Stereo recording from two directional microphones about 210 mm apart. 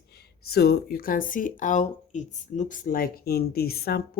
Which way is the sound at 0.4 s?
50° left (ahead or behind).